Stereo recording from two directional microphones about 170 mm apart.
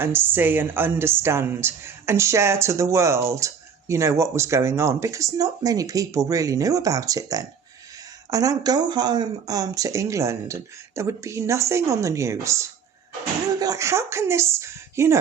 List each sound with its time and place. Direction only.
0.0 s a woman's voice: 10° right (ahead or behind)